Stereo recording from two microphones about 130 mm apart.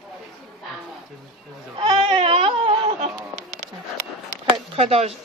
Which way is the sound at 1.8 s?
40° right (ahead or behind).